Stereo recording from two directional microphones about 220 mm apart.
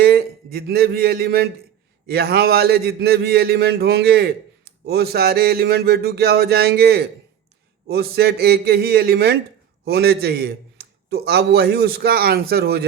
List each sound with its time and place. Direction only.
0.0 s a man's voice: 45° right (ahead or behind)